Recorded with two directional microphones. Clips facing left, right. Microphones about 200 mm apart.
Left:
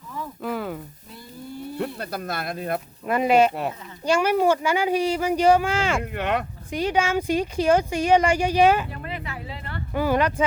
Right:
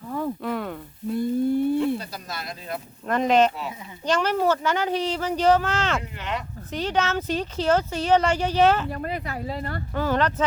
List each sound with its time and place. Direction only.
0.4 s sizzle: centre (ahead or behind)
1.1 s a sound: 55° right (ahead or behind)
2.0 s speech: 55° left (ahead or behind)
3.1 s speech: 10° left (ahead or behind)
3.5 s speech: 60° left (ahead or behind)
4.0 s speech: 10° left (ahead or behind)
6.0 s speech: 55° left (ahead or behind)
6.7 s speech: 10° left (ahead or behind)
8.9 s speech: 40° right (ahead or behind)
9.9 s speech: 10° left (ahead or behind)